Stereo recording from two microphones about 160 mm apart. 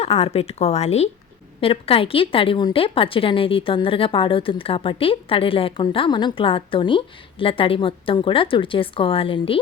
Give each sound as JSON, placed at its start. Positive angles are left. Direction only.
{"t": 0.0, "sound": "a woman's voice", "side_deg": 40}